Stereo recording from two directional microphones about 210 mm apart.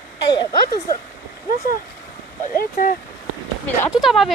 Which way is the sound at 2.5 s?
45° left (ahead or behind).